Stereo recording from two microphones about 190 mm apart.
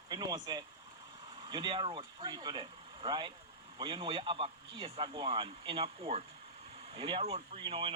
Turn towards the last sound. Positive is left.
turn(degrees=-30)  # may be behind; listen again after turning